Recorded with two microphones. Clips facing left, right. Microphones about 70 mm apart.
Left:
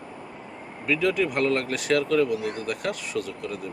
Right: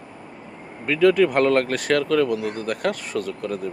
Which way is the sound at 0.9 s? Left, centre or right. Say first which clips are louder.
Right 7 dB; right.